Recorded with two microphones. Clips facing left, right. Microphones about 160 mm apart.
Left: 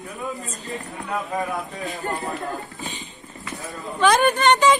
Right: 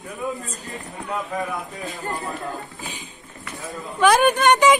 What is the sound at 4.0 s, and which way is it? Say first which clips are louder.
Speech: right 1 dB; 10° right (ahead or behind).